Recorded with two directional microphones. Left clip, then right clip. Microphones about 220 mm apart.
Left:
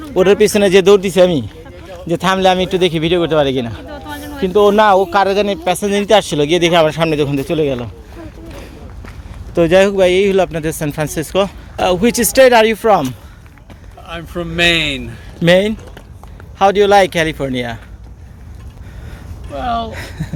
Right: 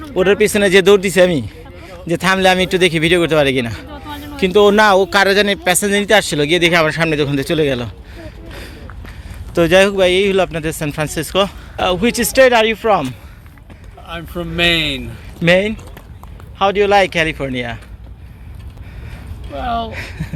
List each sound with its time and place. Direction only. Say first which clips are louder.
0.0 s speech: left 2 dB; 20° left (ahead or behind); by 3.8 s 5° right (ahead or behind)
3.8 s a sound: left 2 dB; 10° left (ahead or behind)
4.4 s speech: even; 10° right (ahead or behind)
9.6 s speech: left 1 dB; 5° left (ahead or behind)
14.1 s speech: left 1 dB; centre (ahead or behind)
15.4 s speech: left 2 dB; 15° left (ahead or behind)
19.5 s speech: left 1 dB; centre (ahead or behind)
19.9 s speech: even; 15° left (ahead or behind)